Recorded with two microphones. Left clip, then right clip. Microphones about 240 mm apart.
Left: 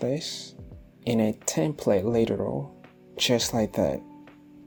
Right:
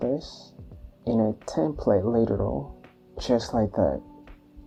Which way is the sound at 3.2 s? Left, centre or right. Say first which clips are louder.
Even; left.